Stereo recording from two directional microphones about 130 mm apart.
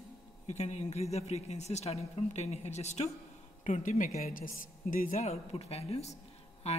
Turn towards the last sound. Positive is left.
turn(degrees=55)  # may be behind; listen again after turning